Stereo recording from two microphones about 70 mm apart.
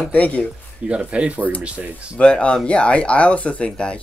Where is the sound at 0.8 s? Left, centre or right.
Centre.